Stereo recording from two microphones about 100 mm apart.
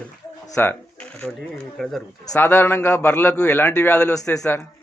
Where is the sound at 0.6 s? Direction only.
20° left (ahead or behind).